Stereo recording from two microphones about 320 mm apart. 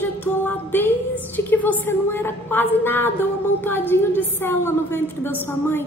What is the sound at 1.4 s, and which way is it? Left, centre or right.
A woman's voice, centre.